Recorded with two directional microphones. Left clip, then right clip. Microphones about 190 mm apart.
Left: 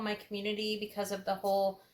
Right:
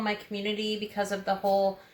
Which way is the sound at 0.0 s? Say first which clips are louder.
Right 5 dB; 30° left (ahead or behind).